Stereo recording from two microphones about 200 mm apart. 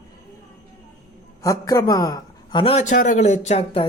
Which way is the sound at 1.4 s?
15° left (ahead or behind).